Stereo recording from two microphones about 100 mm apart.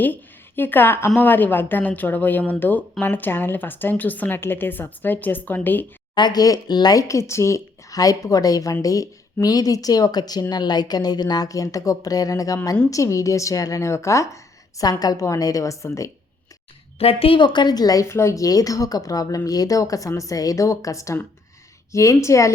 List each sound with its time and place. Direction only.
0.0 s a woman's voice: 20° left (ahead or behind)
6.1 s speech: 45° left (ahead or behind)
17.0 s a woman's voice: 70° left (ahead or behind); by 18.0 s 40° left (ahead or behind)
18.1 s speech: 25° left (ahead or behind)